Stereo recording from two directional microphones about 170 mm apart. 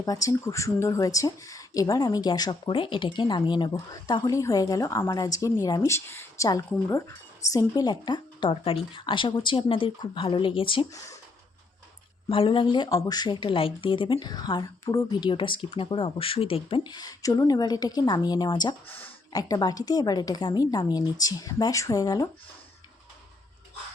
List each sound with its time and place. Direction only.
0.0 s speech: 20° left (ahead or behind)
12.3 s speech: 30° left (ahead or behind)